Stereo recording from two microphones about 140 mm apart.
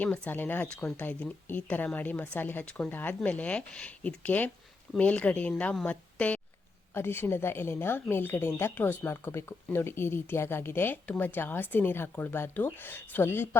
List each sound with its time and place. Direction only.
0.0 s speech: 10° left (ahead or behind)